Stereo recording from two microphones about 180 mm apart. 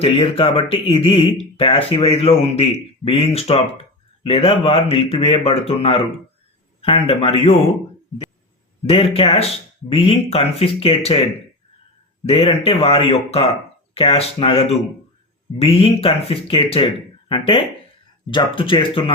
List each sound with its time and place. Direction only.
0.0 s speech: 30° left (ahead or behind)
8.9 s speech: 30° left (ahead or behind)